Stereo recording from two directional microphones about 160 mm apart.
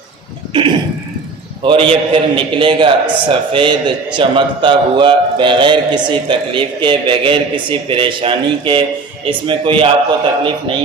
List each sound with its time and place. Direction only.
0.5 s cough: 30° right (ahead or behind)
1.6 s a man's voice: 35° right (ahead or behind)